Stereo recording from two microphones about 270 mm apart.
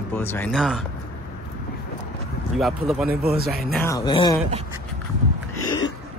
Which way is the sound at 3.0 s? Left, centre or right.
Right.